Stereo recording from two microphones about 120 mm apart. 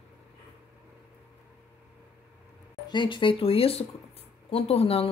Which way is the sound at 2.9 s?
40° left (ahead or behind).